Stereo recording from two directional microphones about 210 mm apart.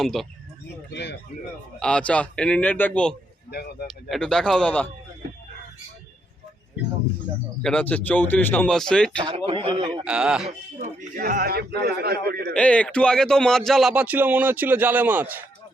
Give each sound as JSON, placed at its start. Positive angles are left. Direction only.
{"t": 0.0, "sound": "speech", "side_deg": 0}
{"t": 0.9, "sound": "speech", "side_deg": 55}
{"t": 1.8, "sound": "speech", "side_deg": 5}
{"t": 3.5, "sound": "speech", "side_deg": 50}
{"t": 3.8, "sound": "speech", "side_deg": 0}
{"t": 7.6, "sound": "speech", "side_deg": 5}
{"t": 9.2, "sound": "a man's voice", "side_deg": -25}
{"t": 10.0, "sound": "speech", "side_deg": -5}
{"t": 10.8, "sound": "a man's voice", "side_deg": -40}
{"t": 12.5, "sound": "speech", "side_deg": 5}